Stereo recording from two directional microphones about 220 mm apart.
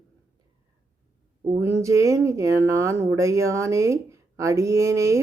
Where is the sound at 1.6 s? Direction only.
15° right (ahead or behind).